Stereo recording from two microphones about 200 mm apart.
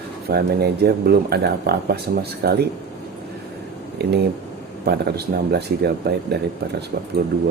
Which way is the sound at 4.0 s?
55° right (ahead or behind).